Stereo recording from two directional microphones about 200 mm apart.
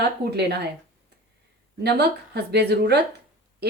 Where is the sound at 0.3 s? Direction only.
55° right (ahead or behind).